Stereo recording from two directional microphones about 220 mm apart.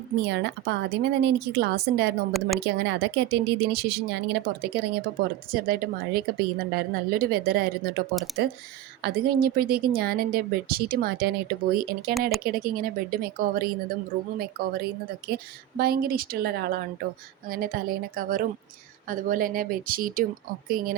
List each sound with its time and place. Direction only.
0.2 s a woman's voice: 50° right (ahead or behind)